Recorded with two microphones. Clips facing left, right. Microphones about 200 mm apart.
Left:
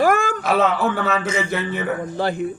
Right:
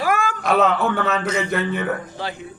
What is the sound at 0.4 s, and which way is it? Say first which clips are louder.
A man's voice: right 2 dB; centre (ahead or behind).